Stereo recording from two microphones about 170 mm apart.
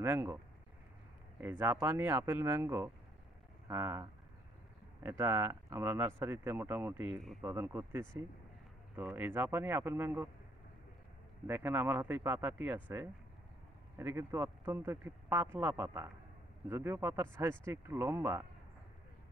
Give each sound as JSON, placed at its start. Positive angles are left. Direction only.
{"t": 0.0, "sound": "speech", "side_deg": -15}
{"t": 1.4, "sound": "speech", "side_deg": -15}
{"t": 11.4, "sound": "speech", "side_deg": -10}